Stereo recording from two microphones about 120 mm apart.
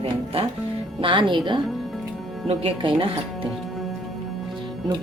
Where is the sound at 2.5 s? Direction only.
50° right (ahead or behind).